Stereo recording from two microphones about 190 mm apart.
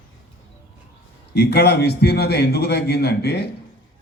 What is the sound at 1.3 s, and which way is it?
A man's voice, 60° left (ahead or behind).